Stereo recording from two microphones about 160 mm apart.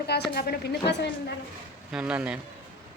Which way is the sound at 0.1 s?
85° left.